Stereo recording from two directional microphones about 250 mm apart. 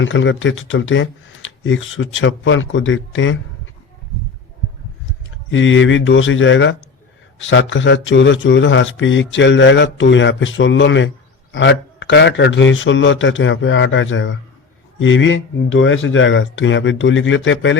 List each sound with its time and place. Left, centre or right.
0.0 s speech: left
5.5 s speech: left